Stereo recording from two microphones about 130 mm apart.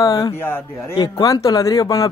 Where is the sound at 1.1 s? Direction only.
30° left (ahead or behind).